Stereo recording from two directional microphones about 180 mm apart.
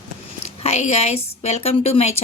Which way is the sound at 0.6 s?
35° left (ahead or behind).